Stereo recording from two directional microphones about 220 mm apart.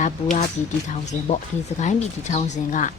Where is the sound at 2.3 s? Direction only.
35° left (ahead or behind).